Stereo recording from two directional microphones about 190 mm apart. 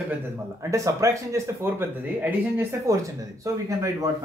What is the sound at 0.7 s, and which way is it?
Speech, 15° right (ahead or behind).